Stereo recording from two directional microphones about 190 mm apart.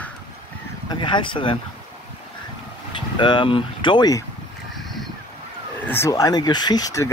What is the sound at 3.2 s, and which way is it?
Speech, 25° left (ahead or behind).